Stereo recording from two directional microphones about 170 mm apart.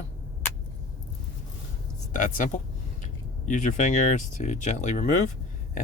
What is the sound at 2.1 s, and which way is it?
Speech, 50° left (ahead or behind).